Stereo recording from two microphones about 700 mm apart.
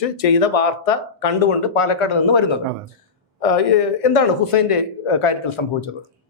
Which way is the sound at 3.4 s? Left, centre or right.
Left.